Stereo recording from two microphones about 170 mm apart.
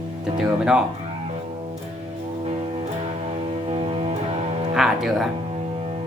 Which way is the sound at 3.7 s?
35° right (ahead or behind).